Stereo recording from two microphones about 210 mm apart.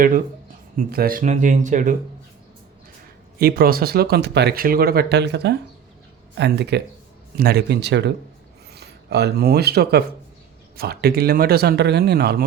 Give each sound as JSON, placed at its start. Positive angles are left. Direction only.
{"t": 0.8, "sound": "speech", "side_deg": -45}
{"t": 3.3, "sound": "speech", "side_deg": -45}